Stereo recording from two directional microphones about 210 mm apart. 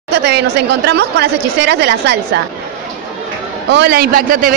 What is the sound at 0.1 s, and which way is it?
A woman's voice, 55° right (ahead or behind).